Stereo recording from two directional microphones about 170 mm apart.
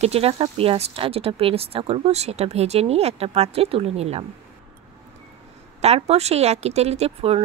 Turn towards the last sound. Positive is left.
turn(degrees=-35)  # may be behind; listen again after turning